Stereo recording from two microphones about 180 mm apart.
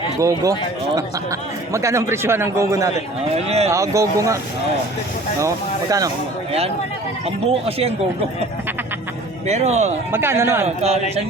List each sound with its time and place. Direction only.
0.2 s speech: 20° right (ahead or behind)
3.3 s speech: 35° right (ahead or behind)
3.7 s speech: 15° right (ahead or behind)
7.3 s speech: 35° right (ahead or behind)
9.5 s speech: 40° right (ahead or behind)
10.1 s speech: 15° right (ahead or behind)